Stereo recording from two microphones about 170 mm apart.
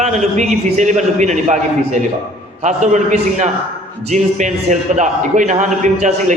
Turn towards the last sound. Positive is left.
turn(degrees=-45)  # may be behind; listen again after turning